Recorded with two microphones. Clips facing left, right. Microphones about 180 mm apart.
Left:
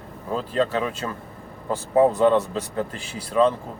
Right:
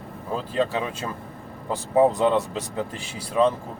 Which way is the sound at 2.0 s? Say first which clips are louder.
Left 2 dB; 15° right (ahead or behind).